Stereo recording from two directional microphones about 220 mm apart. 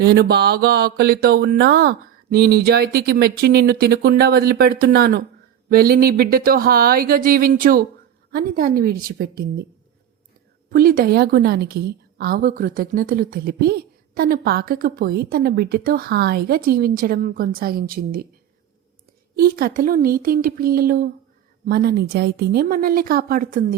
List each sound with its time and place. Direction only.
0.0 s a woman's voice: 45° right (ahead or behind)
10.7 s a woman's voice: 40° right (ahead or behind)
19.4 s a woman's voice: 45° right (ahead or behind)